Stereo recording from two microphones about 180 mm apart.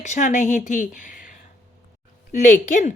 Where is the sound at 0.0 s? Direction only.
45° left (ahead or behind).